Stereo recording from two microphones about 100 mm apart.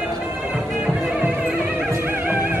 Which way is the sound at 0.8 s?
10° right (ahead or behind).